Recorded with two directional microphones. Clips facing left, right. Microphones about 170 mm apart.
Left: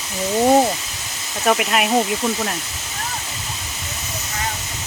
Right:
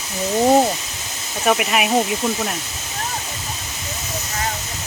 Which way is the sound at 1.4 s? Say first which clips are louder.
Even; 5° right (ahead or behind).